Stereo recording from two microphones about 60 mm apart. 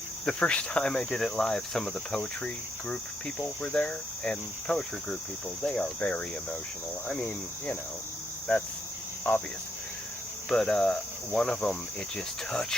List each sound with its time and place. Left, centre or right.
0.3 s cricket: centre
6.0 s cricket: left
10.5 s cricket: centre